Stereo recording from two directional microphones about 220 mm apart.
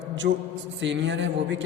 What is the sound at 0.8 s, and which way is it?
Speech, 55° right (ahead or behind).